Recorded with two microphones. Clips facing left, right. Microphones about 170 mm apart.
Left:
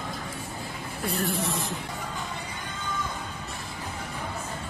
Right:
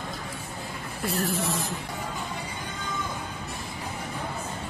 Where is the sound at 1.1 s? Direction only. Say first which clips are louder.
Right 1 dB; centre (ahead or behind).